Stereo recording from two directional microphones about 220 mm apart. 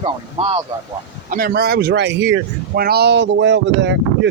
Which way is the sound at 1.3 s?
40° right (ahead or behind).